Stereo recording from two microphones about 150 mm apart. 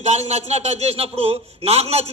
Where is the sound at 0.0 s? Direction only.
45° right (ahead or behind).